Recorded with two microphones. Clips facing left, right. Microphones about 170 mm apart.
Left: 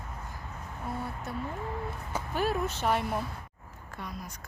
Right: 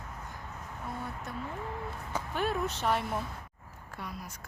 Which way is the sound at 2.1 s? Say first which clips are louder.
Left 2 dB; 5° left (ahead or behind).